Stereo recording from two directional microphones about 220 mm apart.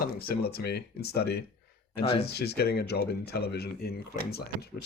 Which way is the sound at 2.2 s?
45° left (ahead or behind).